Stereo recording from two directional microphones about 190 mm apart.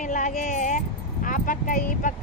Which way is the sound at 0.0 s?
40° left (ahead or behind).